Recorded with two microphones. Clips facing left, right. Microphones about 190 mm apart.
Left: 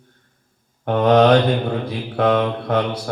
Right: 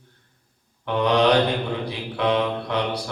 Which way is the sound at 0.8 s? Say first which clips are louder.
Left 5 dB; 45° left (ahead or behind).